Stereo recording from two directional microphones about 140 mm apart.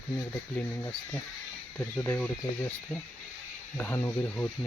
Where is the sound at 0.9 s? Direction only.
10° left (ahead or behind).